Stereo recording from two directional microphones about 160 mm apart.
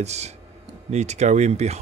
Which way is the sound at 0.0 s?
45° right (ahead or behind).